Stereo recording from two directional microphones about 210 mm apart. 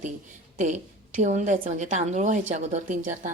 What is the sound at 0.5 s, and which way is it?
A woman's voice, 35° right (ahead or behind).